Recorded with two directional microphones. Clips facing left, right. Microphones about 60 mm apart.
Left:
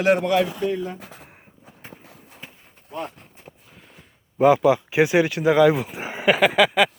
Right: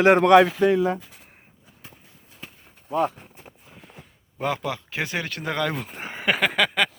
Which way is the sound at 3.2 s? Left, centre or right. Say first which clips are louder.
Right 2 dB; centre.